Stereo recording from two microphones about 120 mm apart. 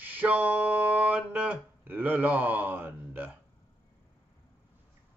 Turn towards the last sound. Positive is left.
turn(degrees=-15)  # may be behind; listen again after turning